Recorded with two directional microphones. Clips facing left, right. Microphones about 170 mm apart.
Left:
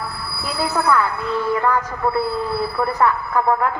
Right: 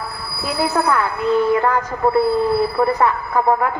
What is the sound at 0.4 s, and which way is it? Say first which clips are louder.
A woman's voice: right 2 dB; 15° right (ahead or behind).